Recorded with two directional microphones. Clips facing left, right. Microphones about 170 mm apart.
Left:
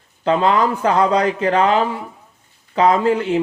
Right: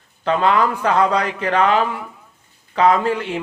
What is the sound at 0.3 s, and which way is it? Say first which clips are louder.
Speech: left 1 dB; 30° left (ahead or behind).